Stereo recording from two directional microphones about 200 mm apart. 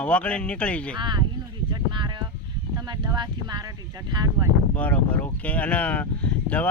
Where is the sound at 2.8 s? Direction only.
20° right (ahead or behind).